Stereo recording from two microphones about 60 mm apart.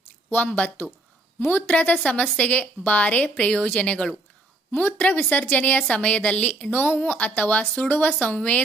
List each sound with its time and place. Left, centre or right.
0.3 s speech: left
4.7 s a woman's voice: left